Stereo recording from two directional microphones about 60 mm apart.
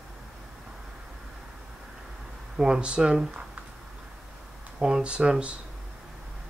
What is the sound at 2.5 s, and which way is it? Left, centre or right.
Speech, centre.